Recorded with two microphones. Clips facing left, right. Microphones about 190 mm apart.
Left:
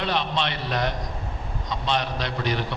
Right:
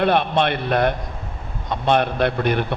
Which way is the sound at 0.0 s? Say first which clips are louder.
Right 8 dB; 55° right (ahead or behind).